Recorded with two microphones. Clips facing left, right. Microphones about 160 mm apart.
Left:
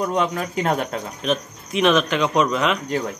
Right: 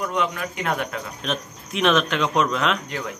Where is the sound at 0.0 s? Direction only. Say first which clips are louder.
Left 3 dB; 35° left (ahead or behind).